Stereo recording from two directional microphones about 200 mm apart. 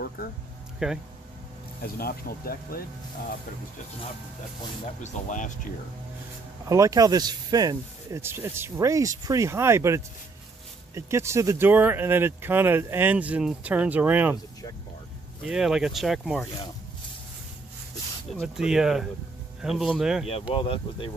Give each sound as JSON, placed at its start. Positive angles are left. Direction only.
{"t": 0.2, "sound": "speech", "side_deg": 50}
{"t": 0.8, "sound": "speech", "side_deg": -5}
{"t": 2.0, "sound": "speech", "side_deg": 50}
{"t": 4.9, "sound": "speech", "side_deg": 40}
{"t": 6.7, "sound": "speech", "side_deg": -15}
{"t": 15.4, "sound": "speech", "side_deg": -5}
{"t": 18.3, "sound": "speech", "side_deg": 0}
{"t": 20.5, "sound": "speech", "side_deg": 25}